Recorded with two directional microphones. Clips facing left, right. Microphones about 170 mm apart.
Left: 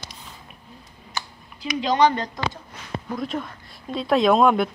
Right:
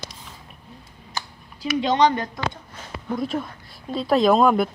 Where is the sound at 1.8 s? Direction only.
20° right (ahead or behind).